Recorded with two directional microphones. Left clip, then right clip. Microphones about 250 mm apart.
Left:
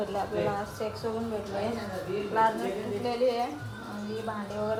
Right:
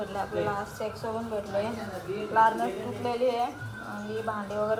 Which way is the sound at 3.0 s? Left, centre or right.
Centre.